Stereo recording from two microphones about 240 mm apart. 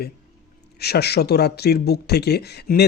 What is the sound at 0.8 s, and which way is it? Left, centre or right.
Speech, left.